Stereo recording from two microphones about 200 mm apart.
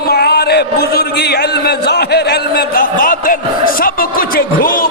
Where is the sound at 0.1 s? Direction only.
50° left (ahead or behind).